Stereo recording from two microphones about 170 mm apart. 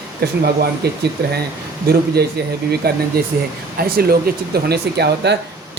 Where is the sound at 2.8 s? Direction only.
65° right (ahead or behind).